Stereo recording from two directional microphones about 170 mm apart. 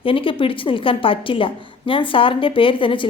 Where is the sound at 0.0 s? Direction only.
30° left (ahead or behind).